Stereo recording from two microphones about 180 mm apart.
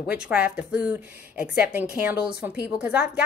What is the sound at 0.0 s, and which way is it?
A woman's voice, 5° right (ahead or behind).